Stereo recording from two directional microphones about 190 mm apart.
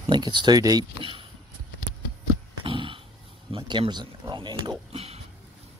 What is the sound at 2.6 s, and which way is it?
Dog, 30° right (ahead or behind).